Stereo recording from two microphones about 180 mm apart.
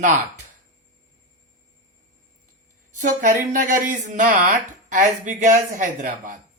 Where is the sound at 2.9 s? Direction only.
45° right (ahead or behind).